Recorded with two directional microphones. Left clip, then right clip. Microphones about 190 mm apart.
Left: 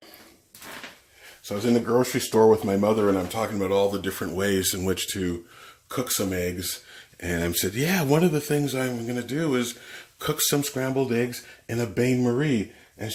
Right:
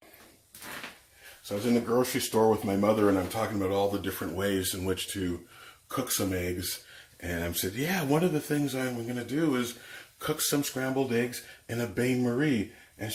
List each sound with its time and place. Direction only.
1.5 s speech: 55° left (ahead or behind)